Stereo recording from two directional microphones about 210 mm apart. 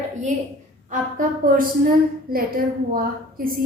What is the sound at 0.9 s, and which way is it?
A woman's voice, 40° right (ahead or behind).